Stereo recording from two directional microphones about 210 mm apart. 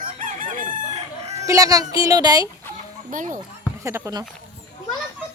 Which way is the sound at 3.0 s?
35° right (ahead or behind).